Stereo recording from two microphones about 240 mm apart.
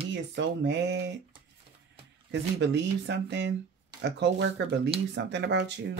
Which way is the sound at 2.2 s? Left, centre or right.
Right.